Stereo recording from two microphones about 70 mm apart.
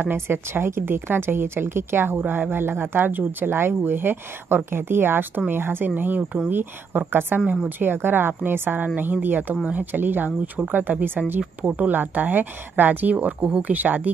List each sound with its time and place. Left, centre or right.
0.0 s a woman's voice: right